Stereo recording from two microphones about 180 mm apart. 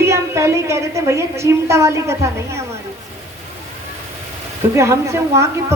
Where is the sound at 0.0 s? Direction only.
15° right (ahead or behind).